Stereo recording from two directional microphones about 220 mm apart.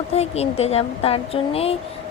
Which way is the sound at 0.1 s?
30° left (ahead or behind).